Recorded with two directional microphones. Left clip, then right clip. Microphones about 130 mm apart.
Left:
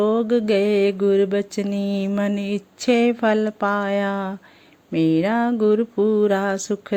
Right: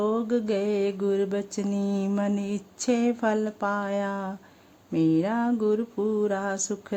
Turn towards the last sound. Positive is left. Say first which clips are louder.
# left 6 dB
turn(degrees=15)  # may be behind; listen again after turning